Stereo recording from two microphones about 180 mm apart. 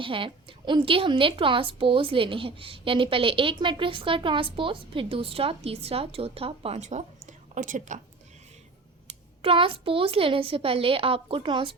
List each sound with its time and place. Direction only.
0.0 s a woman's voice: 30° right (ahead or behind); by 8.0 s 45° right (ahead or behind)
9.0 s a woman's voice: 30° right (ahead or behind)